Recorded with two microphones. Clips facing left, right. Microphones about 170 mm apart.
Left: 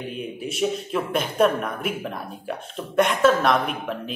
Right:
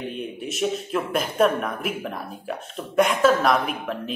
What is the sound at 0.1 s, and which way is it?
Speech, centre (ahead or behind).